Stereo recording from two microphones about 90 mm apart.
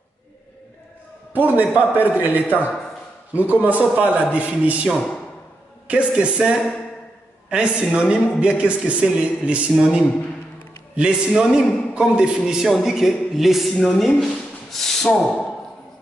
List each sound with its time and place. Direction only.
1.3 s a man's voice: 20° right (ahead or behind)
2.4 s a man's voice: 15° left (ahead or behind)
3.3 s a man's voice: 20° right (ahead or behind); by 15.5 s 5° left (ahead or behind)